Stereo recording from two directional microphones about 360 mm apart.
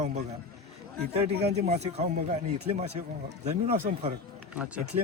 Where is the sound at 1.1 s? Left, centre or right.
Centre.